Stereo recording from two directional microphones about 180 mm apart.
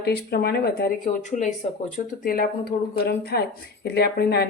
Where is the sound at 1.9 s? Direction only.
50° left (ahead or behind).